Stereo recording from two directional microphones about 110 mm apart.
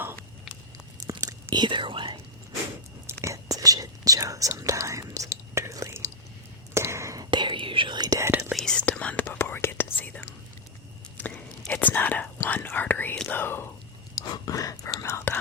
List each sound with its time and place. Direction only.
1.1 s whispering: 35° right (ahead or behind)
1.5 s speech: 45° right (ahead or behind)
3.1 s speech: 25° right (ahead or behind)
6.7 s whispering: 25° right (ahead or behind)
7.3 s whispering: 45° right (ahead or behind)
8.2 s speech: 20° right (ahead or behind)
8.5 s speech: 5° left (ahead or behind)
11.2 s whispering: 10° left (ahead or behind)
11.7 s speech: 15° left (ahead or behind)
14.2 s speech: 35° left (ahead or behind)